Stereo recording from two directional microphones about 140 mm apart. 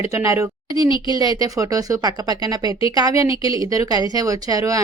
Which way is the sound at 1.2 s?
25° right (ahead or behind).